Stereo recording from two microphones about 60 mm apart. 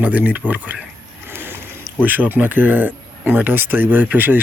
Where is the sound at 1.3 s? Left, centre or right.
Right.